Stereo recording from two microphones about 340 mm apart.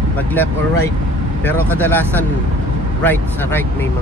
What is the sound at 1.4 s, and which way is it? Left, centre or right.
Speech, centre.